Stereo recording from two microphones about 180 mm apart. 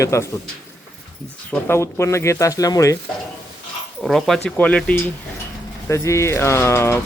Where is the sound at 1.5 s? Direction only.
15° left (ahead or behind).